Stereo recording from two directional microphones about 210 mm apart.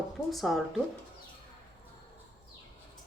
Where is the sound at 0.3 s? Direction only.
Centre (ahead or behind).